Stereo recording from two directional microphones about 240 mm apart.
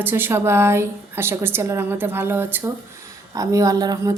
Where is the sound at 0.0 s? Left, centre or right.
Centre.